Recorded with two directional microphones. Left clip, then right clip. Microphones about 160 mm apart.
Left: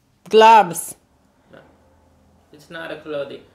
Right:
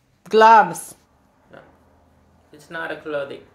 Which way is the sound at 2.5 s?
40° left (ahead or behind).